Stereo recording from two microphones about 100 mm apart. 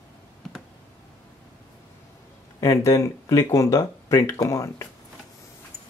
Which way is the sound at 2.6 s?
30° left (ahead or behind).